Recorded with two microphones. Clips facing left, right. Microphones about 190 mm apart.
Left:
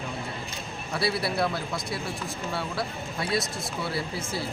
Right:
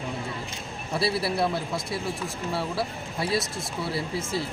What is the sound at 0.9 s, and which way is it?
A man's voice, 25° right (ahead or behind).